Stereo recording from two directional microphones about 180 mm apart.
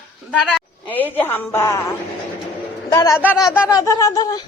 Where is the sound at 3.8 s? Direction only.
15° left (ahead or behind).